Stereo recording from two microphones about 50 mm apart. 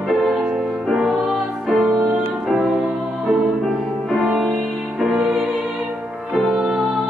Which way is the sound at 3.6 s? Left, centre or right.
Centre.